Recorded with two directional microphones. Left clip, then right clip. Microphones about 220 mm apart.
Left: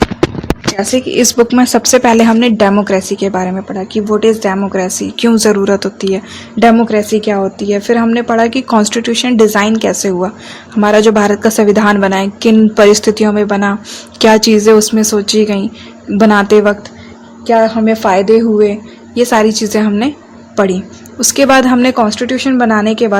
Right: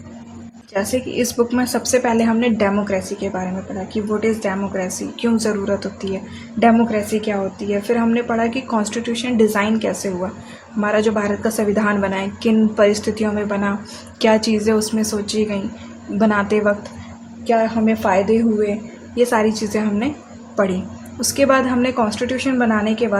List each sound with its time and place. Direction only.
0.8 s speech: 40° left (ahead or behind)
21.2 s speech: 40° left (ahead or behind)